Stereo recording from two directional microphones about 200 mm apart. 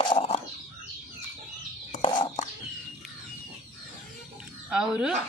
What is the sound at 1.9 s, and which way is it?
Bird, 25° left (ahead or behind).